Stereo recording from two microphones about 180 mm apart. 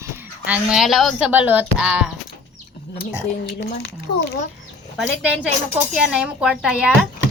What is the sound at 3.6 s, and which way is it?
Speech, 70° left (ahead or behind).